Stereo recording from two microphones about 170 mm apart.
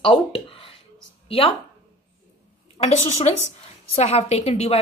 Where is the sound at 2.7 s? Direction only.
40° left (ahead or behind).